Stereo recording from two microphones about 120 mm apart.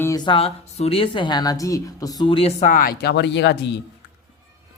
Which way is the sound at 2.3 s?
55° left (ahead or behind).